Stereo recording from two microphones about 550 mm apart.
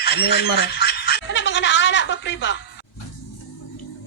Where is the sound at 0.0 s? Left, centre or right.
Centre.